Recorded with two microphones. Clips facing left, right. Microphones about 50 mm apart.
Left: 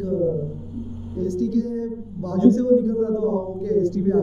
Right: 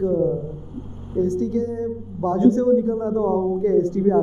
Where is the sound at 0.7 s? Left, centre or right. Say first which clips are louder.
Left 2 dB; right.